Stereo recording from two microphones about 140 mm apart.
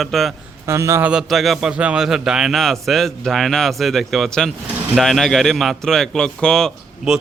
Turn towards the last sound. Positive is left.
turn(degrees=5)  # may be behind; listen again after turning